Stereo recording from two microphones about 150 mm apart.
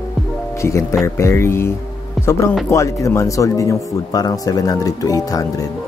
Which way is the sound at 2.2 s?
Centre (ahead or behind).